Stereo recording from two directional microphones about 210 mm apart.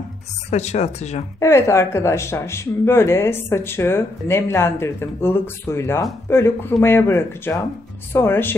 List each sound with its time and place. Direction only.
0.5 s speech: 30° left (ahead or behind)
1.4 s speech: 15° left (ahead or behind)